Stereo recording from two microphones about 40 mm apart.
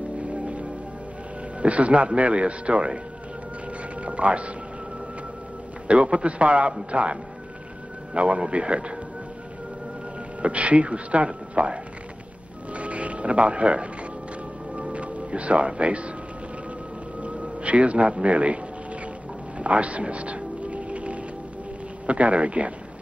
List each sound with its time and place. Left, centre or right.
0.2 s music: right
1.6 s a man's voice: right
4.0 s speech: right
6.0 s a man's voice: right
10.4 s a man's voice: right
12.7 s a sound: right
14.8 s music: right
17.2 s speech: right
19.6 s music: right
22.0 s a man's voice: right